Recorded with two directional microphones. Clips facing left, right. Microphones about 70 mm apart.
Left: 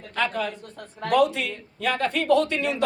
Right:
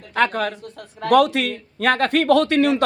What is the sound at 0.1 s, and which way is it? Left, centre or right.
A man's voice, right.